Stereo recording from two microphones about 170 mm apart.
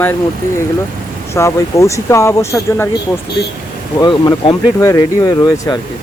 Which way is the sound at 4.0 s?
25° left (ahead or behind).